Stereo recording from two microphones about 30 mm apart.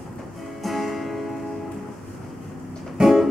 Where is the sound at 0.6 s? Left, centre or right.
Centre.